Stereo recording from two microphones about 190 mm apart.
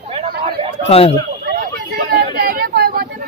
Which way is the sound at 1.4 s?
50° right (ahead or behind).